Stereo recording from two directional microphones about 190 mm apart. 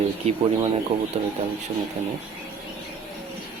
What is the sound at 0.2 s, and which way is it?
Speech, 30° right (ahead or behind).